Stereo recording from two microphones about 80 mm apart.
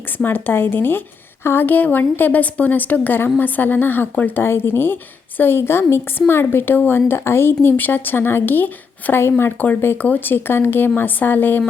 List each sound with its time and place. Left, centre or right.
0.2 s a woman's voice: left